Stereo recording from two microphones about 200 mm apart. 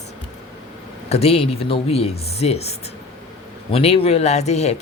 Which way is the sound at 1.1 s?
30° left (ahead or behind).